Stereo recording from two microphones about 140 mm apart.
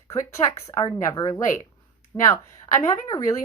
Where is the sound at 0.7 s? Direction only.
20° left (ahead or behind).